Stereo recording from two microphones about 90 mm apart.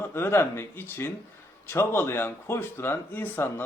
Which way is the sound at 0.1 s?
25° left (ahead or behind).